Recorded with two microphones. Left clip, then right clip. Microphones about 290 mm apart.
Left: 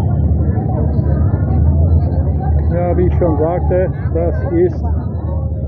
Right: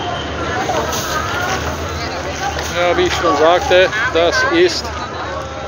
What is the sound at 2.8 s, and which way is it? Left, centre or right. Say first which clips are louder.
Music: right 3 dB; centre.